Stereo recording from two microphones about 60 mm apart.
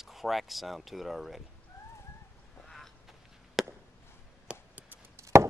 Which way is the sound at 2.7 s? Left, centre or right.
Centre.